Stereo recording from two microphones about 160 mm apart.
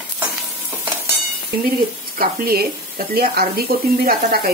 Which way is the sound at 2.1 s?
70° right (ahead or behind).